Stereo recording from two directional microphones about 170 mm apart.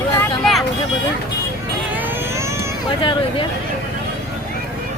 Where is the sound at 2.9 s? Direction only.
30° left (ahead or behind).